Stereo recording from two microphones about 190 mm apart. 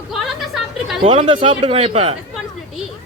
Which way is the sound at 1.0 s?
30° right (ahead or behind).